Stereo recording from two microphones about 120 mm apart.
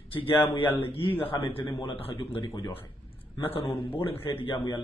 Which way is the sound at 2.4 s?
40° left (ahead or behind).